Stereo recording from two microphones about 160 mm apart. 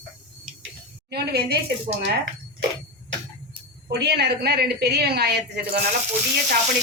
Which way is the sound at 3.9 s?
90° right.